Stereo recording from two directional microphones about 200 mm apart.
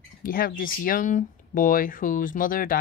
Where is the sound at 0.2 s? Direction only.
45° left (ahead or behind).